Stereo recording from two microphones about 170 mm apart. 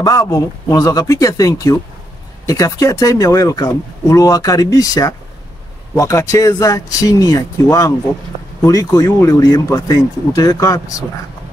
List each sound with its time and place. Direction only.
0.0 s speech: 20° left (ahead or behind)